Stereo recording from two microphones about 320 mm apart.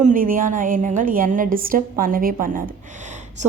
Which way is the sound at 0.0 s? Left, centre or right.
Right.